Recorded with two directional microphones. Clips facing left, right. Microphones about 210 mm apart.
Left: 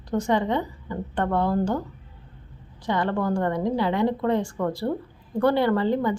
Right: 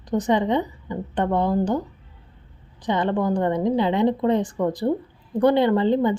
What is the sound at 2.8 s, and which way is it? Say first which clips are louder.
A woman's voice: right 3 dB; 20° right (ahead or behind).